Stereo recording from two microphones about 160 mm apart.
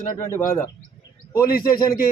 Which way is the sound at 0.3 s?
15° left (ahead or behind).